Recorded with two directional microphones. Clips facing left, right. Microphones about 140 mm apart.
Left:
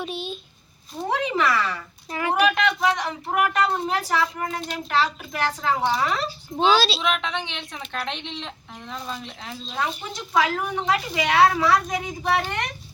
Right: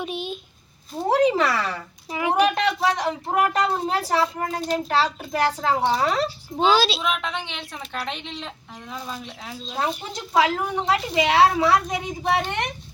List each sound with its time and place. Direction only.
0.0 s a sound: 15° right (ahead or behind)
1.0 s speech: 35° right (ahead or behind)
2.0 s a sound: 10° right (ahead or behind)
2.6 s speech: 35° right (ahead or behind)
6.6 s a woman's voice: 5° right (ahead or behind)
10.3 s a woman's voice: 25° right (ahead or behind)